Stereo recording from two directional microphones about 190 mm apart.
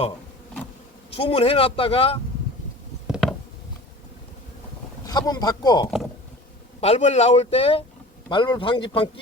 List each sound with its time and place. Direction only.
1.1 s speech: 30° left (ahead or behind)
3.1 s a sound: centre (ahead or behind)
5.0 s speech: 20° left (ahead or behind)
6.8 s speech: 35° left (ahead or behind)